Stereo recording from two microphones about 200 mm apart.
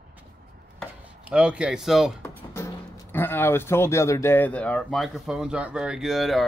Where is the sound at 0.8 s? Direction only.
5° right (ahead or behind).